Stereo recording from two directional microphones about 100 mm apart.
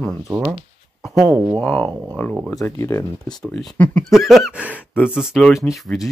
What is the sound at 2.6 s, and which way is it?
Speech, 25° left (ahead or behind).